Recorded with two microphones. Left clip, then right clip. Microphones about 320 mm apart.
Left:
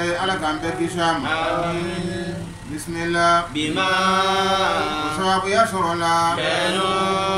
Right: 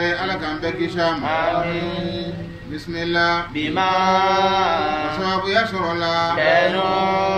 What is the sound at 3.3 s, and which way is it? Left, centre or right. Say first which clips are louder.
Mantra: left 2 dB; centre.